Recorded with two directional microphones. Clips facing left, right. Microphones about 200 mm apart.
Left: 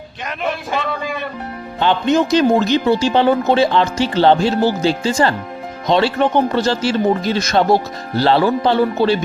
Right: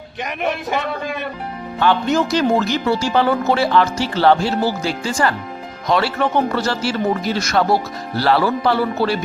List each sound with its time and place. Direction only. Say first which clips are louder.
1.8 s speech: left 2 dB; 20° left (ahead or behind)